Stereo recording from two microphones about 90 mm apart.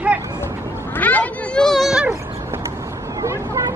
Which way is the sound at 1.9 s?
5° right (ahead or behind).